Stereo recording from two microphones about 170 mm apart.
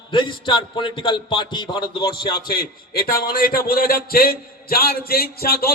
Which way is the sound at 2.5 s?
60° left (ahead or behind).